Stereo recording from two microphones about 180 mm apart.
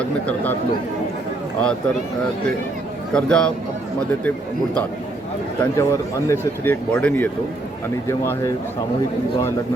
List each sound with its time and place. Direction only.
0.0 s speech: 10° left (ahead or behind)
3.1 s a man's voice: 5° left (ahead or behind)
5.7 s speech: 15° left (ahead or behind)